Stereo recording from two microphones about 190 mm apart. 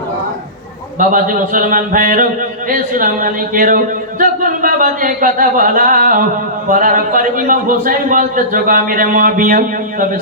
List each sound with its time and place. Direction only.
0.9 s a man's voice: 45° right (ahead or behind)